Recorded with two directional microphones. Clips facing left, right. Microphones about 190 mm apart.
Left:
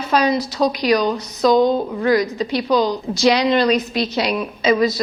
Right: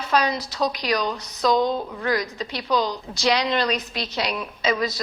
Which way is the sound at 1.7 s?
35° left (ahead or behind).